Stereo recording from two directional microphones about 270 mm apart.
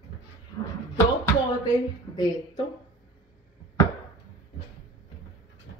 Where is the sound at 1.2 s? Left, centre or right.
Centre.